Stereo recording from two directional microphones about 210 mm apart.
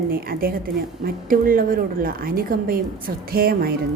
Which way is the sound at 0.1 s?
45° right (ahead or behind).